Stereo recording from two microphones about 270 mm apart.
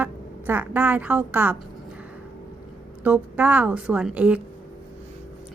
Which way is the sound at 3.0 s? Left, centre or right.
Centre.